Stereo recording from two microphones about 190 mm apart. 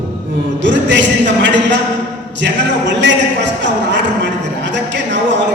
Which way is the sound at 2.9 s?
70° right (ahead or behind).